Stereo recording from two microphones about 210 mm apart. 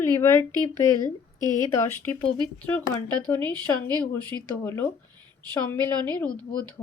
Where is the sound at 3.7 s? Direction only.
20° right (ahead or behind).